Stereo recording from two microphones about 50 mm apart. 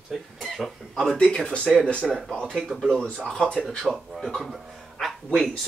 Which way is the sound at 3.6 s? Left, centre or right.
Centre.